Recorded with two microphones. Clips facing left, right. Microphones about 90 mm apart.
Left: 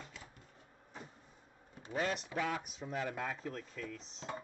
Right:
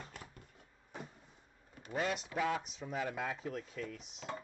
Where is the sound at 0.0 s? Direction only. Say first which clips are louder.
Right 2 dB; 50° right (ahead or behind).